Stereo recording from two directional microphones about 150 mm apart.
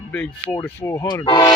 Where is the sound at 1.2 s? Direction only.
30° left (ahead or behind).